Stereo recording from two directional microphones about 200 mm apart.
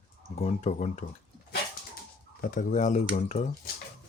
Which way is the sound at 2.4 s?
40° left (ahead or behind).